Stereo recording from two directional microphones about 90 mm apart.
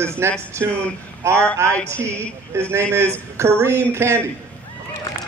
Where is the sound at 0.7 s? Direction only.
15° left (ahead or behind).